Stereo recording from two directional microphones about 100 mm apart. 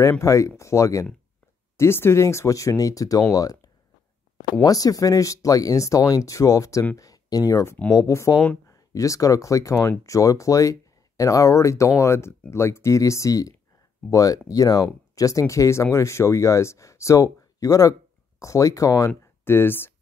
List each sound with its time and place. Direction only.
0.2 s speech: 30° left (ahead or behind)
19.4 s speech: 25° left (ahead or behind)